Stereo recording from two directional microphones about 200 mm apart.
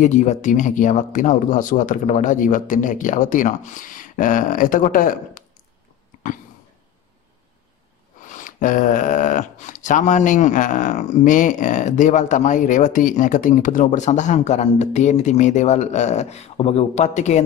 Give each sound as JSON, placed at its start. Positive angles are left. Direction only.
{"t": 0.0, "sound": "speech", "side_deg": 35}
{"t": 8.3, "sound": "speech", "side_deg": 40}